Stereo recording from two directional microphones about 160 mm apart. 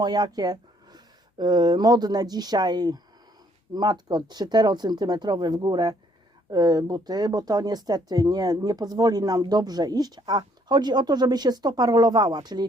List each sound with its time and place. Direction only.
0.0 s speech: 25° right (ahead or behind)